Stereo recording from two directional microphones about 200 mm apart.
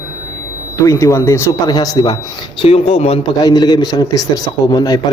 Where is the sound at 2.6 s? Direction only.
30° left (ahead or behind).